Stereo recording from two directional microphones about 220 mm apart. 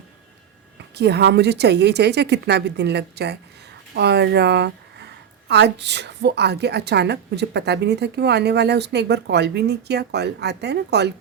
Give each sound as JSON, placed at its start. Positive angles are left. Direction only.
{"t": 0.9, "sound": "speech", "side_deg": -50}